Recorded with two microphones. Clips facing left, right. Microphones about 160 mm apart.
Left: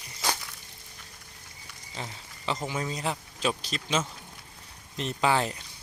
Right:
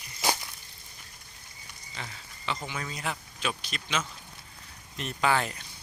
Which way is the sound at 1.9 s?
35° left (ahead or behind).